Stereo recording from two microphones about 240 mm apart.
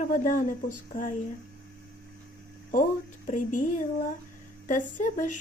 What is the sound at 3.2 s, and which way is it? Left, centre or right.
Speech, left.